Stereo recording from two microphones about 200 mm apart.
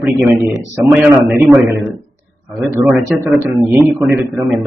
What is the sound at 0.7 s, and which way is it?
Speech, 10° right (ahead or behind).